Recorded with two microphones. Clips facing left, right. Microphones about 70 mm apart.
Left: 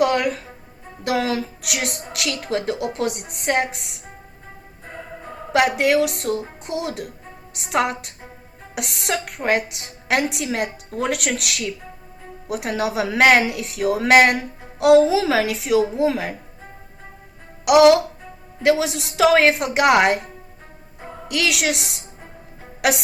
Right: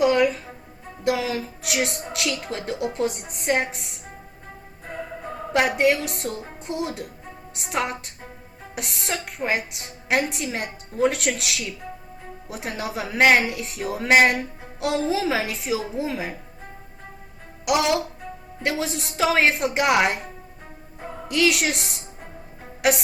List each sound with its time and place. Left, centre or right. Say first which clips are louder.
0.0 s a woman's voice: even; left
1.9 s a woman's voice: even; centre
2.5 s a woman's voice: left 4 dB; left
4.9 s music: right 3 dB; centre
5.5 s a woman's voice: left 3 dB; left
7.7 s a woman's voice: left 5 dB; left
15.1 s a woman's voice: left 5 dB; left
16.0 s a woman's voice: left 7 dB; left
17.7 s a woman's voice: left 9 dB; left
18.6 s a woman's voice: left 8 dB; left
19.1 s a woman's voice: left 5 dB; left
21.2 s a woman's voice: right 1 dB; left